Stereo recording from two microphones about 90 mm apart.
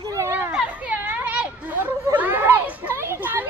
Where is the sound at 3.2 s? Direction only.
20° right (ahead or behind).